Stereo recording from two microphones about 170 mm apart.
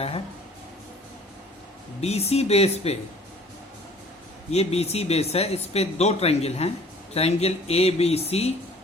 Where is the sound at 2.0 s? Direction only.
35° left (ahead or behind).